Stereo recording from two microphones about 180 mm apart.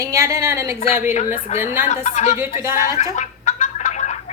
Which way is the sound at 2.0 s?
40° left (ahead or behind).